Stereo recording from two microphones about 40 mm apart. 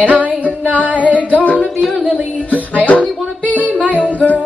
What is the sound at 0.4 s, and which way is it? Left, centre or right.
Music, left.